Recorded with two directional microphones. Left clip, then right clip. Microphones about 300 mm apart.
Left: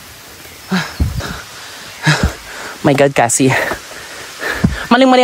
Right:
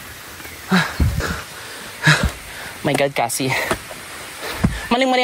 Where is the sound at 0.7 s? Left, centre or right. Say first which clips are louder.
Right 1 dB; centre.